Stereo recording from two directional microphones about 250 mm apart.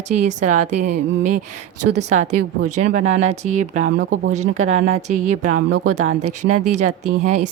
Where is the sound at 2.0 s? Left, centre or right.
Right.